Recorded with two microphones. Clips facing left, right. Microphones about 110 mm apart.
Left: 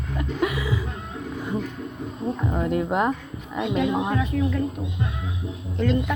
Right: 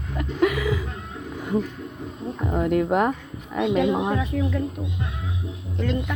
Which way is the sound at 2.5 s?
55° right (ahead or behind).